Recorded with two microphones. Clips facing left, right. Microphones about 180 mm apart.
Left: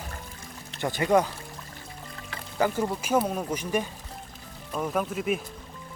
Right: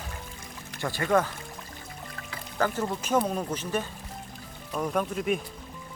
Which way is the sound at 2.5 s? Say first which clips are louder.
Left 2 dB; 15° left (ahead or behind).